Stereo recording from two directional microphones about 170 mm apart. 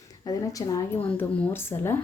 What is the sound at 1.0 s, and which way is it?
Speech, 10° left (ahead or behind).